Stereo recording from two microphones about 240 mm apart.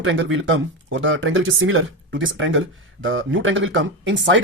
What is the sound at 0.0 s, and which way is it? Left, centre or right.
A woman's voice, right.